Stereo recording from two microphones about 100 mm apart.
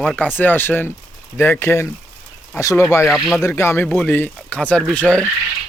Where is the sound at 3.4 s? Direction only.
25° left (ahead or behind).